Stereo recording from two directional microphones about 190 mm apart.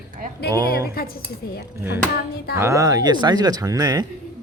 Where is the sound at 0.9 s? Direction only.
50° left (ahead or behind).